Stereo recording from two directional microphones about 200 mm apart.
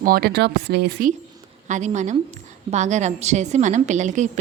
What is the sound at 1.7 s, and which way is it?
A woman's voice, 35° right (ahead or behind).